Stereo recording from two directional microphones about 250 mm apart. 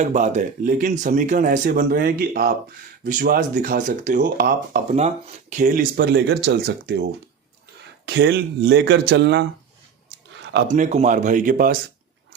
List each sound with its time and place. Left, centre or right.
0.0 s speech: right
8.0 s speech: right
10.7 s speech: right